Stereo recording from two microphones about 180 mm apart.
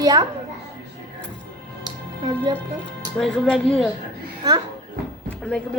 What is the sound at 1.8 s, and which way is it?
Music, 25° right (ahead or behind).